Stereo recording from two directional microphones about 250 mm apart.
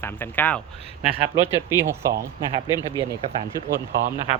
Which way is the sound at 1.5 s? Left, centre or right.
Centre.